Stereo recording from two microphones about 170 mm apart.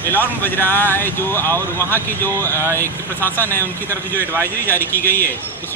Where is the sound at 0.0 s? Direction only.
10° left (ahead or behind).